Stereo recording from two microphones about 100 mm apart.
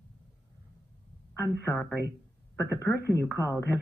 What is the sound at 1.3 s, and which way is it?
A man's voice, 25° left (ahead or behind).